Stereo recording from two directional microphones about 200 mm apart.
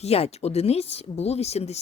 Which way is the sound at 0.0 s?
30° left (ahead or behind).